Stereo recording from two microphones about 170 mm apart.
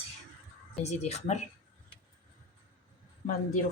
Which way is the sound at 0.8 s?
40° left (ahead or behind).